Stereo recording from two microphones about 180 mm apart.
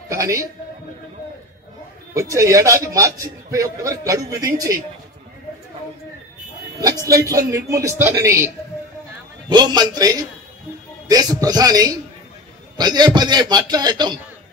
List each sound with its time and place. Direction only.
0.1 s a man's voice: 20° right (ahead or behind)
2.1 s a man's voice: 15° right (ahead or behind)
7.1 s a man's voice: 20° right (ahead or behind)
9.5 s a man's voice: 25° right (ahead or behind)